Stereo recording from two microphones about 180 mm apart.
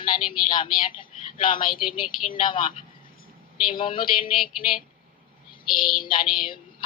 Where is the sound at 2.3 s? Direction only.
25° left (ahead or behind).